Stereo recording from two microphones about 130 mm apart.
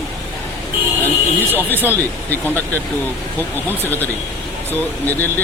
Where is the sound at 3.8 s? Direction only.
15° left (ahead or behind).